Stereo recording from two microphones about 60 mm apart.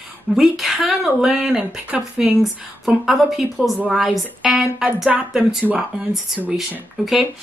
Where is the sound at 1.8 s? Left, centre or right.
Right.